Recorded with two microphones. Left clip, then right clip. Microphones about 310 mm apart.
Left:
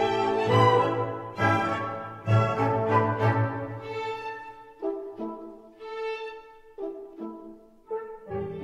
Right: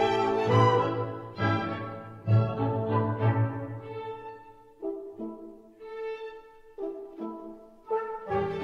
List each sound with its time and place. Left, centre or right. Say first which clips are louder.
0.0 s music: left 1 dB; centre; by 2.5 s left
2.5 s music: left 5 dB; left
5.9 s violin: left 3 dB; centre
6.9 s music: even; centre
7.9 s music: right 4 dB; right